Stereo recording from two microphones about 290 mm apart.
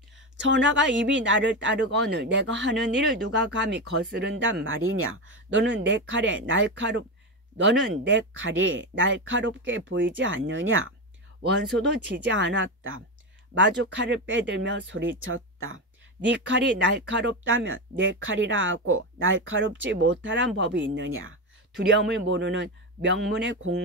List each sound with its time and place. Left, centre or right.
0.4 s speech: right
12.2 s speech: right